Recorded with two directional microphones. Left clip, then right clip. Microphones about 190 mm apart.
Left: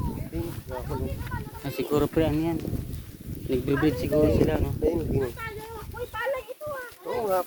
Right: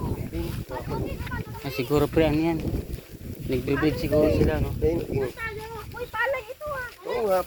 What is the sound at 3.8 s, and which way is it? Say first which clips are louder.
Speech: right 2 dB; 20° left (ahead or behind).